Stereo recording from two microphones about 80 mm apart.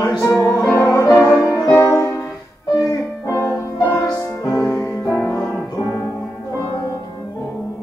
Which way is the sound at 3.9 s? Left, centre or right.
Left.